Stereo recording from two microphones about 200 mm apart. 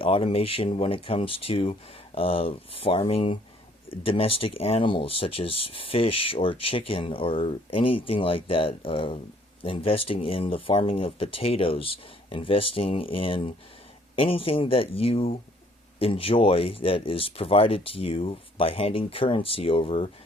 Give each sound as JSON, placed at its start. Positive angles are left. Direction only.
{"t": 0.0, "sound": "speech", "side_deg": 30}